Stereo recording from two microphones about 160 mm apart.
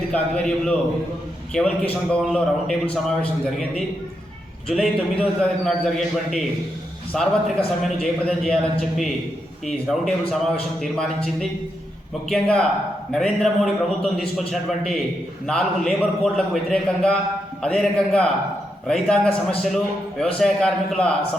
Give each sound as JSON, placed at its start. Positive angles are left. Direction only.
{"t": 0.1, "sound": "a man's voice", "side_deg": 5}